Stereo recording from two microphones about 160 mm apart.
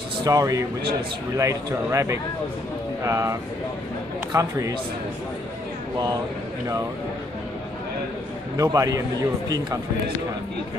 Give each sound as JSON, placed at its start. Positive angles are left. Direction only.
{"t": 0.2, "sound": "speech", "side_deg": -20}
{"t": 8.5, "sound": "speech", "side_deg": -20}